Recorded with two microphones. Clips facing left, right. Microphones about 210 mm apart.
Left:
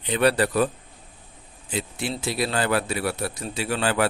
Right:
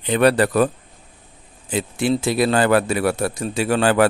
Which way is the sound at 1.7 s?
50° right (ahead or behind).